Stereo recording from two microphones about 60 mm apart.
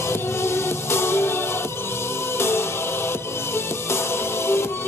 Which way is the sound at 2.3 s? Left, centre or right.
Left.